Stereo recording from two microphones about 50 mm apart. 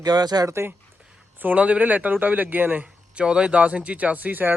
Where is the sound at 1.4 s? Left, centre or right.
Right.